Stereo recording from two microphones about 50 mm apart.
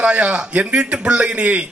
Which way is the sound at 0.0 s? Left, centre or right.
Right.